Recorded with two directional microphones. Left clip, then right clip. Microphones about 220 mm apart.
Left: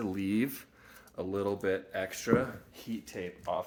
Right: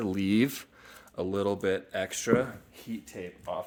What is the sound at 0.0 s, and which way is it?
Speech, 45° right (ahead or behind).